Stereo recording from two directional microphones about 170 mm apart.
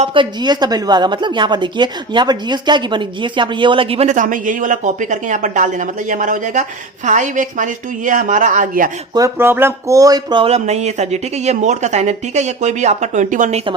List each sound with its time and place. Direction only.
0.0 s a woman's voice: 30° right (ahead or behind); by 8.9 s 55° right (ahead or behind)
9.1 s speech: 15° right (ahead or behind); by 13.6 s 50° right (ahead or behind)